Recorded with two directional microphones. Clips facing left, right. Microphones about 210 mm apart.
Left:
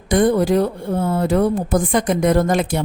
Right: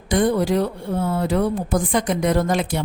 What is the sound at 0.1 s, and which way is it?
Speech, 50° left (ahead or behind).